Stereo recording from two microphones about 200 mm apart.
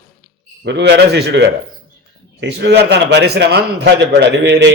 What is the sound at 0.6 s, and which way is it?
A man's voice, 60° right (ahead or behind).